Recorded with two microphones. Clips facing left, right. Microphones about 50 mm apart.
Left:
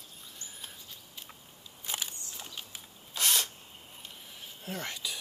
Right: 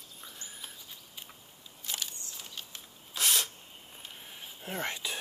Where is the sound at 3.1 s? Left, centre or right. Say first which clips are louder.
Even; centre.